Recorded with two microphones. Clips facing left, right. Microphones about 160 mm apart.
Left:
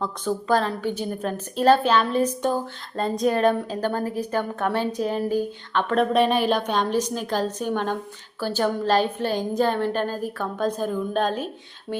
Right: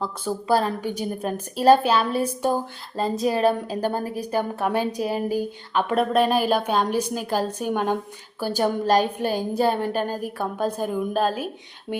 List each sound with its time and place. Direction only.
0.0 s a woman's voice: 10° right (ahead or behind)
11.9 s speech: 15° right (ahead or behind)